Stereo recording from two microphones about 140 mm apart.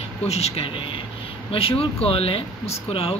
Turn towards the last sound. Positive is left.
turn(degrees=45)  # may be behind; listen again after turning